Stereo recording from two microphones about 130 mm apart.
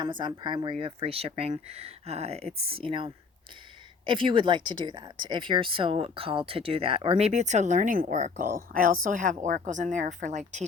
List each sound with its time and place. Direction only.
0.0 s a woman's voice: 35° right (ahead or behind); by 10.7 s 65° right (ahead or behind)